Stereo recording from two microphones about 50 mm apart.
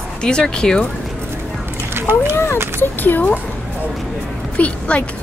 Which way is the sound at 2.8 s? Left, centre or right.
Left.